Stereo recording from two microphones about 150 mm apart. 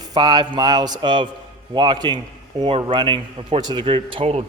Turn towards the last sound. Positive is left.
turn(degrees=-40)  # may be behind; listen again after turning